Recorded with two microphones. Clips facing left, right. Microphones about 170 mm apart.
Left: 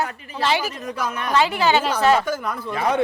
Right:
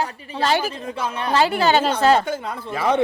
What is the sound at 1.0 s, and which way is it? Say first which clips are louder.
Speech: even; 30° right (ahead or behind).